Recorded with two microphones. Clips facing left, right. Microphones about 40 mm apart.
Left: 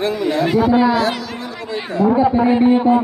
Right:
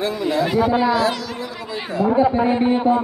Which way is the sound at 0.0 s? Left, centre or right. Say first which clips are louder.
Left 2 dB; left.